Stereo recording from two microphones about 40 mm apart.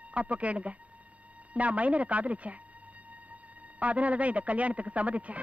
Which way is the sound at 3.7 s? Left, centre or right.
Right.